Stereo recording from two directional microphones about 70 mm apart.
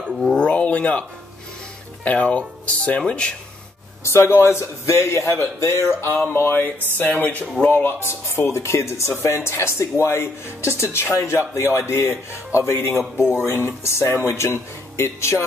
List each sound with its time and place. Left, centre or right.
0.1 s speech: centre
2.0 s speech: centre
4.0 s speech: left